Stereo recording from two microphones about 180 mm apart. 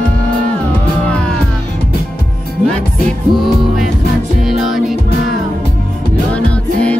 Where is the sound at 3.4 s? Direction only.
Centre (ahead or behind).